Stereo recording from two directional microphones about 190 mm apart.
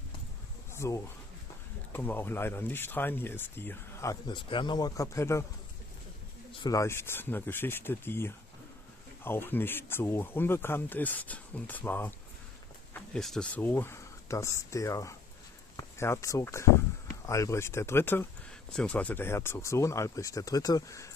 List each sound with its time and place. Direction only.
0.7 s speech: 15° left (ahead or behind)
6.5 s speech: 20° left (ahead or behind)
13.1 s speech: 5° left (ahead or behind)